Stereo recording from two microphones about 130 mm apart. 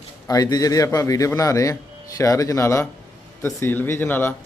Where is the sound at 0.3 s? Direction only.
30° left (ahead or behind).